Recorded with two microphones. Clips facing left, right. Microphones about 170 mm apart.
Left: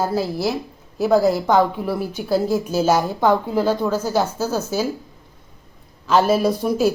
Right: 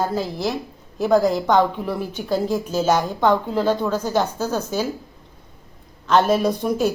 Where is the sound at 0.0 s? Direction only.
5° left (ahead or behind).